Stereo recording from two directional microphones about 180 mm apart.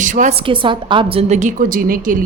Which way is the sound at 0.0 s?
45° right (ahead or behind).